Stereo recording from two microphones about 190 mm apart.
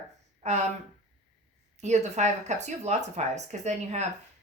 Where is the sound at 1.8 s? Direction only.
35° right (ahead or behind).